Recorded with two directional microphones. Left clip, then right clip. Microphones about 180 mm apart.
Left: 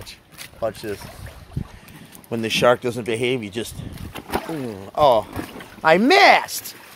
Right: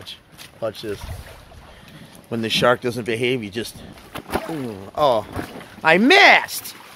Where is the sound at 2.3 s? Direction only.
5° left (ahead or behind).